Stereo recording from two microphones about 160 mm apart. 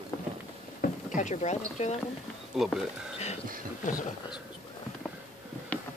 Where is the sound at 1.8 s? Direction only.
45° left (ahead or behind).